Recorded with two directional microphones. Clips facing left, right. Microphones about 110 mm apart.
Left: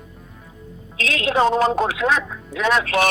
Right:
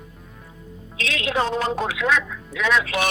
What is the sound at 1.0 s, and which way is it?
A woman's voice, 40° left (ahead or behind).